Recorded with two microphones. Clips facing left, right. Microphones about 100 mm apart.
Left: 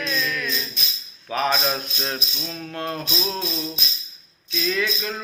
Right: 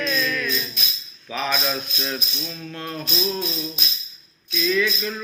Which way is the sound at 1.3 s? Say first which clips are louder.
Left 4 dB; 40° left (ahead or behind).